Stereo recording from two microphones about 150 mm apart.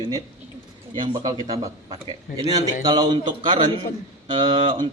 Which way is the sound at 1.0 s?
30° right (ahead or behind).